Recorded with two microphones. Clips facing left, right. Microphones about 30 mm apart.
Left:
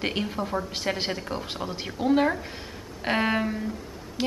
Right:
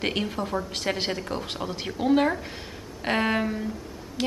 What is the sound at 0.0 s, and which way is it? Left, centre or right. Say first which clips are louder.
Speech: right 1 dB; centre.